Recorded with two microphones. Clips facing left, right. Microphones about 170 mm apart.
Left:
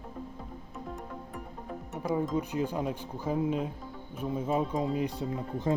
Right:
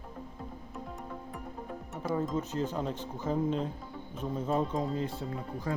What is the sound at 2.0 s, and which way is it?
Speech, 10° left (ahead or behind).